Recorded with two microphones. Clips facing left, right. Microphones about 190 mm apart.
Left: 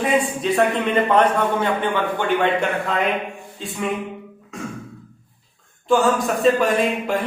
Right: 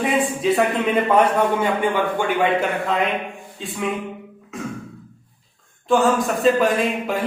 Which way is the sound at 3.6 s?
Centre (ahead or behind).